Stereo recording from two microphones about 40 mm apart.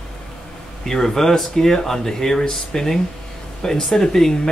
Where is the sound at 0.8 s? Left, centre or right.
Centre.